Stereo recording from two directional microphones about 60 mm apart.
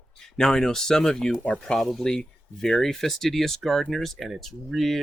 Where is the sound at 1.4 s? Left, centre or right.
Left.